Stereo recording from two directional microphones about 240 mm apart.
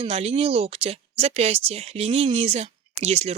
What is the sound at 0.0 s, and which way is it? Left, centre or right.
Speech, right.